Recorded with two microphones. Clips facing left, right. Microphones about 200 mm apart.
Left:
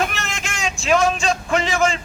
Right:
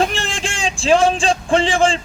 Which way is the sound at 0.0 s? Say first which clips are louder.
Right 5 dB; 30° right (ahead or behind).